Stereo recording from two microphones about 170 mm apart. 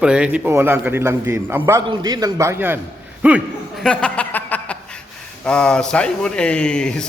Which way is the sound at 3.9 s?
5° left (ahead or behind).